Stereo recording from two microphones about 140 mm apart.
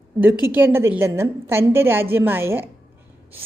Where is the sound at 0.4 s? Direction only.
15° right (ahead or behind).